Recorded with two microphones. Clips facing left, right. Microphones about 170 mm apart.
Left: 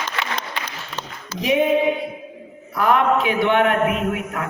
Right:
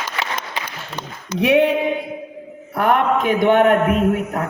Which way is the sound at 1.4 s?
65° right (ahead or behind).